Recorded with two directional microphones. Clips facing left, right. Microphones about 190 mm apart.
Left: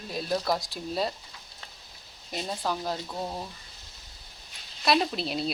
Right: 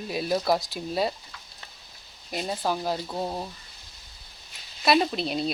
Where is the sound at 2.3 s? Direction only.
5° right (ahead or behind).